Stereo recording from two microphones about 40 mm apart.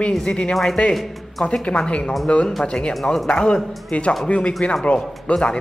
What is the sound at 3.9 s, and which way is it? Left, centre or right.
Speech, left.